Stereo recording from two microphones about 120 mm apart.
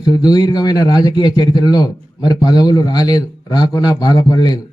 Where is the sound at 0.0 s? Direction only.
35° left (ahead or behind).